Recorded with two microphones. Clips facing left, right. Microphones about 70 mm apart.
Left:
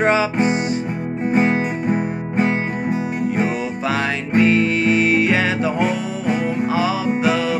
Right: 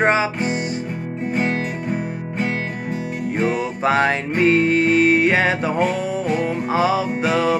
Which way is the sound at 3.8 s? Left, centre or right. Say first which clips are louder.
Right 6 dB; right.